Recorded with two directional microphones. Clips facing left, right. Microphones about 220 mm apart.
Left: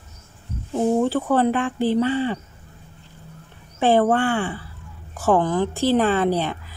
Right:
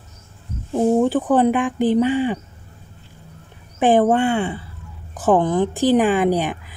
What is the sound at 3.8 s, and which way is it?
A woman's voice, 15° right (ahead or behind).